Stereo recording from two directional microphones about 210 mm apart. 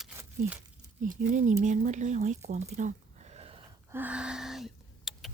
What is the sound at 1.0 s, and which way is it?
Speech, 40° right (ahead or behind).